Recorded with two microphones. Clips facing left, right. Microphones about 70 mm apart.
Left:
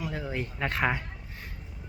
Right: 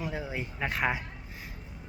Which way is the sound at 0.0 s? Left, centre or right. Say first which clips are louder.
Left 1 dB; centre.